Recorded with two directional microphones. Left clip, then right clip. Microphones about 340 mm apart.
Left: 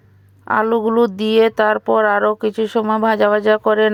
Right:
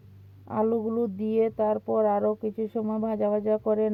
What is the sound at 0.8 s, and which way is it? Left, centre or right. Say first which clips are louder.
Speech: left 13 dB; left.